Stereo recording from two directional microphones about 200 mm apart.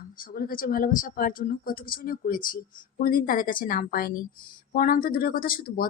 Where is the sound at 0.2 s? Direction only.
45° left (ahead or behind).